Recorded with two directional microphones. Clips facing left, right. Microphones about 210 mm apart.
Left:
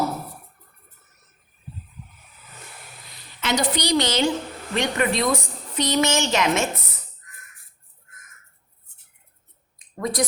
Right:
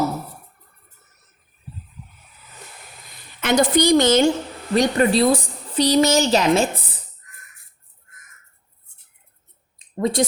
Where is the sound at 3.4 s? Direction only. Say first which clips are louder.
Right 7 dB; 50° right (ahead or behind).